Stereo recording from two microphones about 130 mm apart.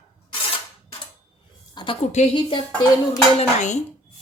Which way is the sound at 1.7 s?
40° left (ahead or behind).